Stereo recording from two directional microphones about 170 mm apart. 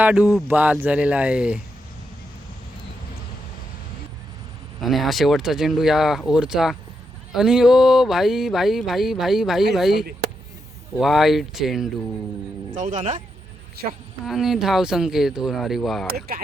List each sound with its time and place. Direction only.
0.0 s speech: 5° right (ahead or behind)
4.8 s speech: centre (ahead or behind)
12.7 s speech: 50° right (ahead or behind)
14.3 s speech: centre (ahead or behind)
16.1 s speech: 65° right (ahead or behind)